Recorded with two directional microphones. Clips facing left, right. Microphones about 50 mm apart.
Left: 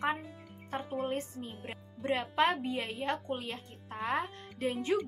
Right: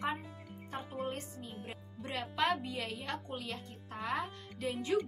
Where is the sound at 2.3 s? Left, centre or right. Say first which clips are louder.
Left 2 dB; left.